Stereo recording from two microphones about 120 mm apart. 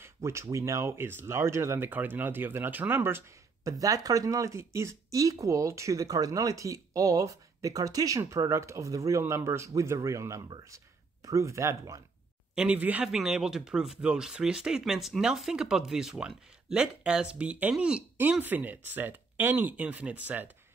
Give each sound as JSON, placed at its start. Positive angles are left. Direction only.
{"t": 0.0, "sound": "speech", "side_deg": -20}
{"t": 3.8, "sound": "speech", "side_deg": -30}
{"t": 12.5, "sound": "speech", "side_deg": -10}